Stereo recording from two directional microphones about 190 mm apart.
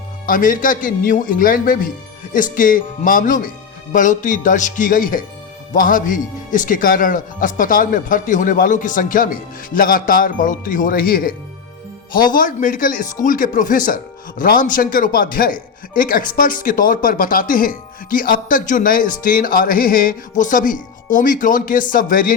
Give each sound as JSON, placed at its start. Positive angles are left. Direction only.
{"t": 0.3, "sound": "speech", "side_deg": 45}